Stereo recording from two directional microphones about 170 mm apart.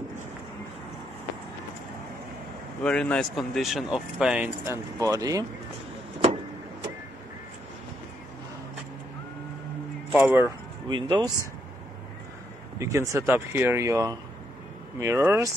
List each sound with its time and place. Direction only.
2.8 s speech: 5° left (ahead or behind); by 5.4 s 20° right (ahead or behind)
10.1 s speech: 10° right (ahead or behind)
10.9 s speech: 25° right (ahead or behind)
12.7 s speech: 20° right (ahead or behind)